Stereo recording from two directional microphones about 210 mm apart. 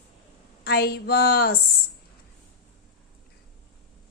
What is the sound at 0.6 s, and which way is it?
Speech, 50° left (ahead or behind).